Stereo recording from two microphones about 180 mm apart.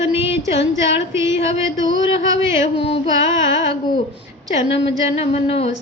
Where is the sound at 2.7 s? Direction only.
30° left (ahead or behind).